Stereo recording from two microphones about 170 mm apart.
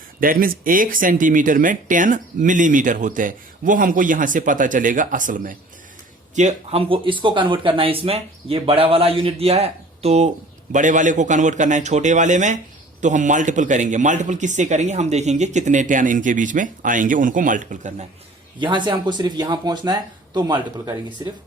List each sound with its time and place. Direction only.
0.2 s speech: 55° right (ahead or behind)
6.3 s speech: 40° right (ahead or behind)
18.6 s speech: 30° right (ahead or behind)